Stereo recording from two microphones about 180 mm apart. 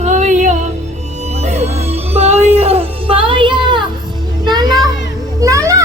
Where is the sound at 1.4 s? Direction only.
40° right (ahead or behind).